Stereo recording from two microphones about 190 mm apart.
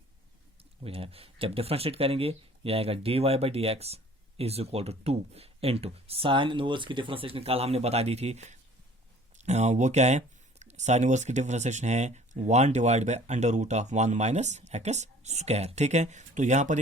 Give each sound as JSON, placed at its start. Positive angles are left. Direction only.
{"t": 0.9, "sound": "speech", "side_deg": -30}